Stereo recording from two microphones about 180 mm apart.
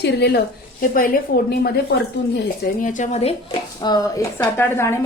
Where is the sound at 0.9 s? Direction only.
50° left (ahead or behind); by 2.4 s 65° left (ahead or behind).